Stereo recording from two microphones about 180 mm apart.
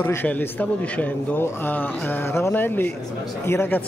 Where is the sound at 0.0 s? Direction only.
10° left (ahead or behind).